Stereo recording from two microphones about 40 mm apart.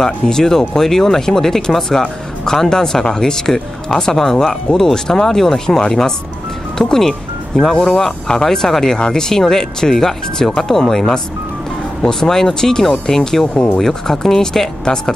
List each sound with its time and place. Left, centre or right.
0.0 s speech: centre
7.7 s speech: left
8.5 s speech: centre